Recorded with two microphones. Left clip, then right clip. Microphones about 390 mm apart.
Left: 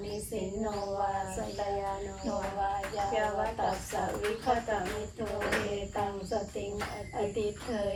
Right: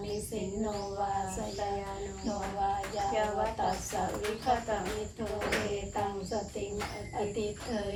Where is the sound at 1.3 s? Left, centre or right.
Centre.